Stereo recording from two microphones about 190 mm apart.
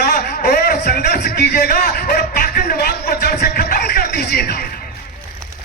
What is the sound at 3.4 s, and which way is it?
Music, 50° left (ahead or behind).